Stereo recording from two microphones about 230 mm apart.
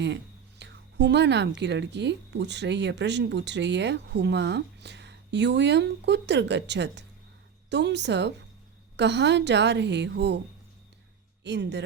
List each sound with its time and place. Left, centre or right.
0.6 s a woman's voice: right
11.4 s a woman's voice: right